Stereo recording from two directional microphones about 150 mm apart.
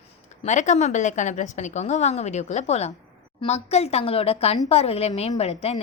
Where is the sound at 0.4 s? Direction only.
50° left (ahead or behind).